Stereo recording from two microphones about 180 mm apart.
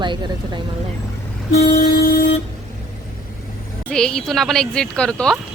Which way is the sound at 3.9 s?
5° left (ahead or behind).